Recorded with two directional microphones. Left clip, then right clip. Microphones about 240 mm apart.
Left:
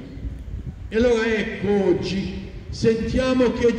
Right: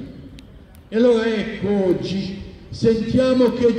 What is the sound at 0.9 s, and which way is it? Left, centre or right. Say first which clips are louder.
A man's voice: right 2 dB; centre.